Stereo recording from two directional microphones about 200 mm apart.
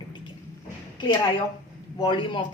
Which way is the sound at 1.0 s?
20° left (ahead or behind).